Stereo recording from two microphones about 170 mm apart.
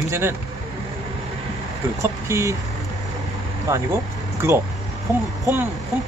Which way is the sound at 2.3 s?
15° right (ahead or behind).